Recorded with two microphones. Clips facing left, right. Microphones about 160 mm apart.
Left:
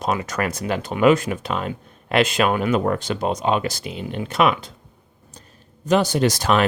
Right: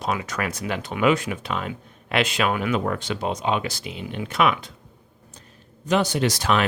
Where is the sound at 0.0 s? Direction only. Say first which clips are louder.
Left 3 dB; 45° left (ahead or behind).